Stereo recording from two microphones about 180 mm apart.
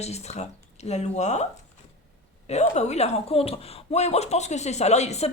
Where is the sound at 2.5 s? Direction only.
40° left (ahead or behind).